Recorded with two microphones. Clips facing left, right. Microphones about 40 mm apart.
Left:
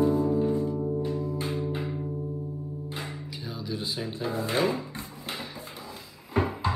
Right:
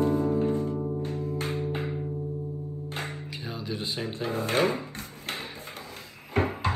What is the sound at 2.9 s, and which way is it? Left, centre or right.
Music, right.